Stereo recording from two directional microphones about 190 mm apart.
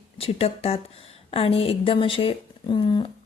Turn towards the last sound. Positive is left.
turn(degrees=25)  # may be behind; listen again after turning